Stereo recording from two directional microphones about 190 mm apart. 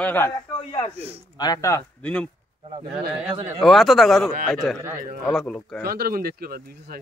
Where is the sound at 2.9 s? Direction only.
5° right (ahead or behind).